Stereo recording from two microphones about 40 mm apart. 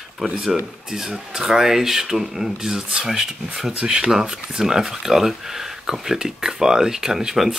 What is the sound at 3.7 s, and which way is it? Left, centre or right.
Speech, right.